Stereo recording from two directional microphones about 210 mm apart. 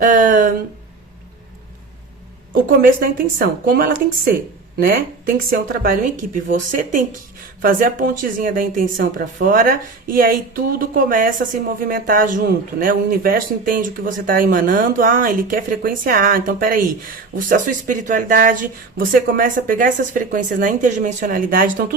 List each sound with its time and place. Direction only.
0.0 s a woman's voice: 40° right (ahead or behind)
2.6 s a woman's voice: 40° right (ahead or behind)